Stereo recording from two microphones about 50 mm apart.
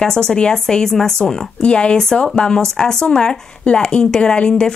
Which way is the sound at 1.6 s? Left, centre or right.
Left.